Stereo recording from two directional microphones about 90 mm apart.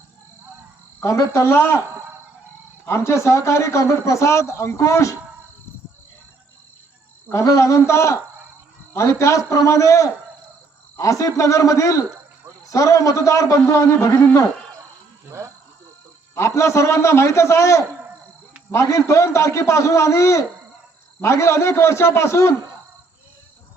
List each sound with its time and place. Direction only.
0.9 s speech: 35° left (ahead or behind)
2.8 s a man's voice: 30° left (ahead or behind)
7.4 s a man's voice: 35° left (ahead or behind)
15.3 s speech: 30° right (ahead or behind)
16.3 s a man's voice: 30° left (ahead or behind)